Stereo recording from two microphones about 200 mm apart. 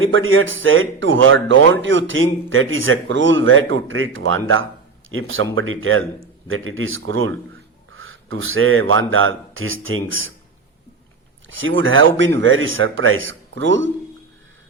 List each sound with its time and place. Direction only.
0.0 s speech: 80° right
11.4 s speech: 75° right (ahead or behind)